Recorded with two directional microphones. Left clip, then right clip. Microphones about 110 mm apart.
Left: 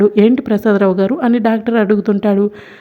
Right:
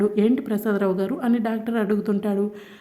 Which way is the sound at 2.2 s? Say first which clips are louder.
Left 10 dB; 55° left (ahead or behind).